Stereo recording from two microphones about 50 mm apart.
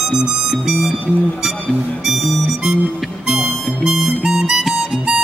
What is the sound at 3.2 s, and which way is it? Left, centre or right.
Harmonica, centre.